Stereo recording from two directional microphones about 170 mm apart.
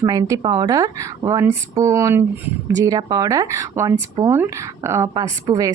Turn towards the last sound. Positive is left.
turn(degrees=-20)  # may be behind; listen again after turning